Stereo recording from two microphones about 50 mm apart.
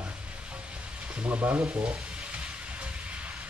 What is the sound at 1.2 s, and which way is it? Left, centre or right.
Frying, right.